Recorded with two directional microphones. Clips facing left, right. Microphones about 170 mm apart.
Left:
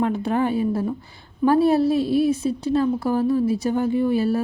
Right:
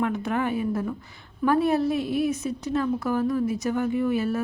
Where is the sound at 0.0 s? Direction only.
30° left (ahead or behind).